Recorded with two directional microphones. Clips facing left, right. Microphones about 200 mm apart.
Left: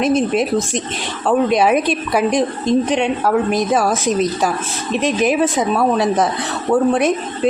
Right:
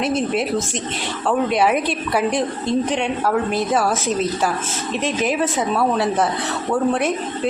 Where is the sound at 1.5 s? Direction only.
15° left (ahead or behind).